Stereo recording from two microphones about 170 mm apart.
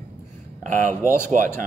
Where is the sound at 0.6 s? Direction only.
50° right (ahead or behind).